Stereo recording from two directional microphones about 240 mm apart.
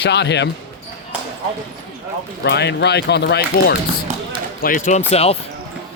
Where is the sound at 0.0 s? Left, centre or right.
Left.